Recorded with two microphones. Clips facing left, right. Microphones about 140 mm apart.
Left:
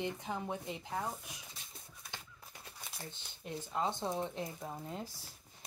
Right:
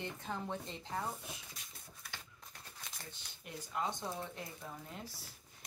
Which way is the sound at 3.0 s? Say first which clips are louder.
Left 4 dB; 25° left (ahead or behind).